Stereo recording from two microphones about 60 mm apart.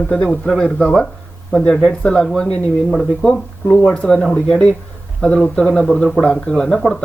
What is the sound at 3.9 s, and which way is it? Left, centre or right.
Speech, left.